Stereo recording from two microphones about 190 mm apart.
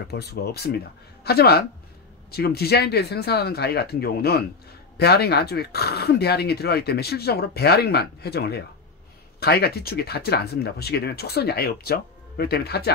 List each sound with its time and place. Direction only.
0.1 s speech: 55° left (ahead or behind)